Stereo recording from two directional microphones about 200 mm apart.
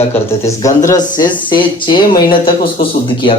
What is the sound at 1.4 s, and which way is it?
Speech, 25° left (ahead or behind).